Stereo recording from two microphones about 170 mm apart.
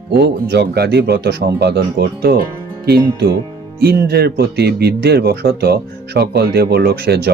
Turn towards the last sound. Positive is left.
turn(degrees=-65)  # may be behind; listen again after turning